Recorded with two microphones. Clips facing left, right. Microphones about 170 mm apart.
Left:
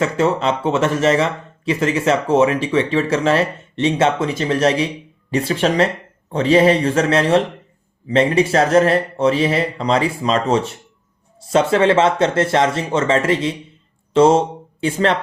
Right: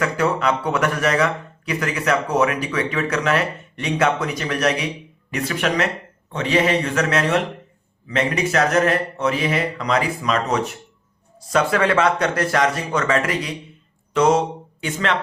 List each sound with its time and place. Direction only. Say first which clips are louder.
0.0 s speech: left 3 dB; 25° left (ahead or behind)